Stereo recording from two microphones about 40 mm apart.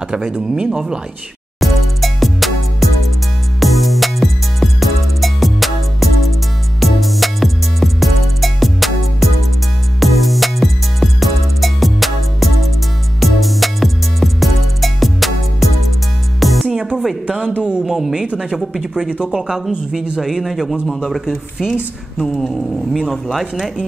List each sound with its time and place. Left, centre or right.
0.5 s speech: centre
1.6 s music: centre
17.8 s speech: centre
18.9 s speech: right
20.2 s speech: centre
20.8 s speech: centre
21.3 s speech: centre
22.2 s speech: centre
22.9 s speech: centre
23.4 s speech: centre